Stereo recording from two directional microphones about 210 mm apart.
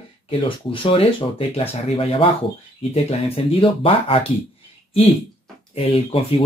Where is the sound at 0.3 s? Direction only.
25° left (ahead or behind).